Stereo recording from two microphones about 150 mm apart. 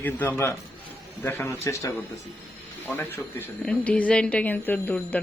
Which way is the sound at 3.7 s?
10° left (ahead or behind).